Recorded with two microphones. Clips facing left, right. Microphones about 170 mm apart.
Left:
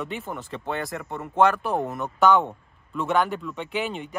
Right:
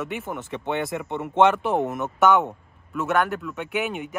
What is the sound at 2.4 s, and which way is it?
Speech, 10° right (ahead or behind).